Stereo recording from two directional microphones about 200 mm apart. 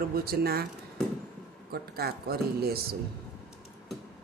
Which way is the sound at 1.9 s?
50° right (ahead or behind).